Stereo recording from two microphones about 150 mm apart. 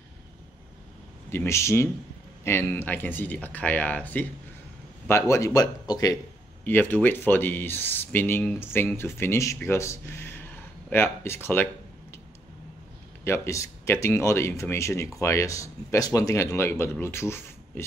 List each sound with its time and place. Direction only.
1.3 s speech: 15° left (ahead or behind)
6.6 s speech: 10° left (ahead or behind)
13.2 s speech: 20° left (ahead or behind)